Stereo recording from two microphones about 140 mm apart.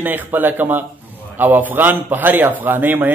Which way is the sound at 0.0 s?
15° right (ahead or behind).